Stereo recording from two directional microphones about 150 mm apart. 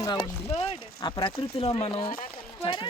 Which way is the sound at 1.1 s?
35° left (ahead or behind).